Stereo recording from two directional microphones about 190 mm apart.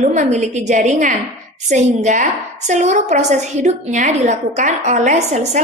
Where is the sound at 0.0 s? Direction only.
40° right (ahead or behind).